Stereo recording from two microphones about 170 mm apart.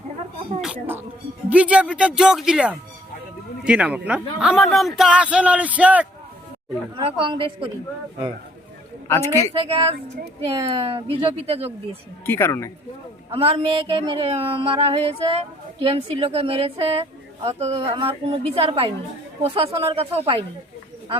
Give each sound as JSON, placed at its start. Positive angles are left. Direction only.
{"t": 0.6, "sound": "speech", "side_deg": -10}
{"t": 6.9, "sound": "a woman's voice", "side_deg": -30}
{"t": 9.0, "sound": "a woman's voice", "side_deg": 15}
{"t": 9.6, "sound": "a woman's voice", "side_deg": -30}
{"t": 12.2, "sound": "a woman's voice", "side_deg": 15}
{"t": 13.3, "sound": "a woman's voice", "side_deg": -35}